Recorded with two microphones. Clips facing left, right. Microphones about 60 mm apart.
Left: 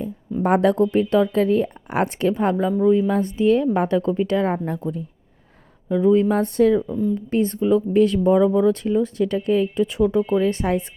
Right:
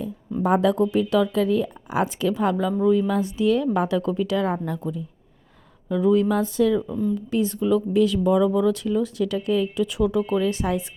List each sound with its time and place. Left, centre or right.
0.4 s speech: left
1.9 s speech: left
5.9 s speech: left
6.4 s speech: left
6.8 s speech: centre
7.3 s speech: left
10.5 s speech: left